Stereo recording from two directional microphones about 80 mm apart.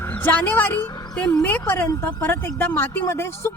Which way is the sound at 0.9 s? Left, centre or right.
Left.